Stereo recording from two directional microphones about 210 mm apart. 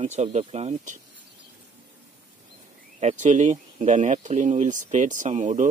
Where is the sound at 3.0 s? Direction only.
35° right (ahead or behind).